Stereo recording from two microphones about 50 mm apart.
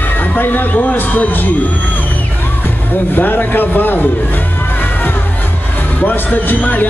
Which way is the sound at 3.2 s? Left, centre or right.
Left.